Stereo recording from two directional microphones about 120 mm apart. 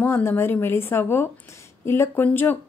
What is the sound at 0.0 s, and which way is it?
A woman's voice, 15° left (ahead or behind).